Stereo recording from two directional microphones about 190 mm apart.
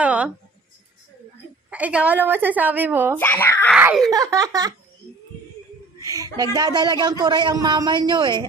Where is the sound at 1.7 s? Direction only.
5° right (ahead or behind).